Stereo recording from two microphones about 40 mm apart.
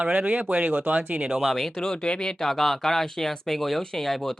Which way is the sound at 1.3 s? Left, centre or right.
Centre.